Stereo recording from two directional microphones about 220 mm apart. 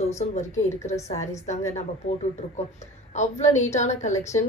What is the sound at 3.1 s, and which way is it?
A woman's voice, 30° left (ahead or behind).